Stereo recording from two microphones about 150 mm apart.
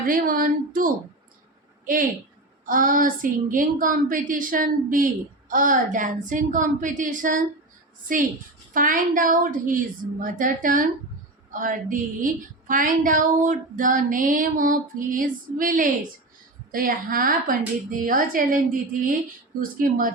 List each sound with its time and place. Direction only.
0.0 s a woman's voice: 70° right (ahead or behind)
8.7 s a woman's voice: 65° right (ahead or behind)